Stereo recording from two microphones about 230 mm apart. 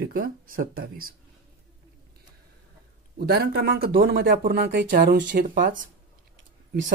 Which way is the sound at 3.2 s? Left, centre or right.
Right.